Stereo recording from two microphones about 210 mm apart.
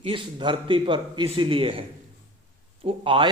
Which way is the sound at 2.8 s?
25° right (ahead or behind).